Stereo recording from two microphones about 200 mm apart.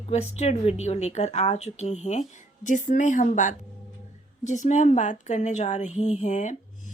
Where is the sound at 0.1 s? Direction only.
35° left (ahead or behind).